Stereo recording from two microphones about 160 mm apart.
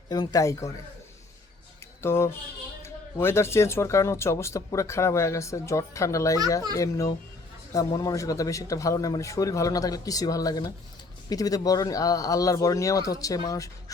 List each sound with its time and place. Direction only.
0.1 s a man's voice: 25° left (ahead or behind)
2.0 s a man's voice: 15° left (ahead or behind)